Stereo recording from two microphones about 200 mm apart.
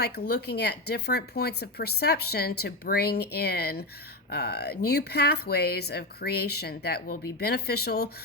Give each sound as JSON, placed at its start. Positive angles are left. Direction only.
{"t": 0.4, "sound": "speech", "side_deg": 55}